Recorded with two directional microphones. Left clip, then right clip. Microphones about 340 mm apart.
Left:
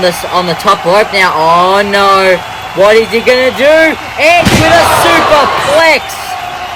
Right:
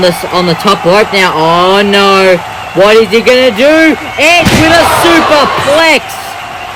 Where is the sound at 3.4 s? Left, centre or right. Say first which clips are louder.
Right 1 dB; right.